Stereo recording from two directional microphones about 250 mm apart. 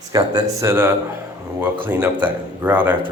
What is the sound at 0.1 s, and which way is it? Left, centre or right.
Speech, centre.